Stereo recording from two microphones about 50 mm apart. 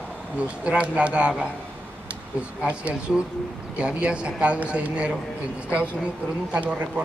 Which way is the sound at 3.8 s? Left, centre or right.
Right.